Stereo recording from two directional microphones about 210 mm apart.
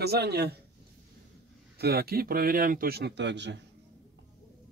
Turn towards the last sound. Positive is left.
turn(degrees=-55)  # may be behind; listen again after turning